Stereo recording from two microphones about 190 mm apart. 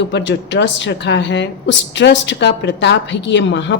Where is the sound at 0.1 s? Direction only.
65° left (ahead or behind).